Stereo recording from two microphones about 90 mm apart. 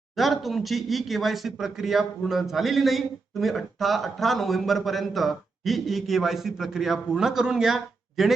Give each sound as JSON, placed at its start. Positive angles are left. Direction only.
{"t": 0.2, "sound": "speech", "side_deg": 0}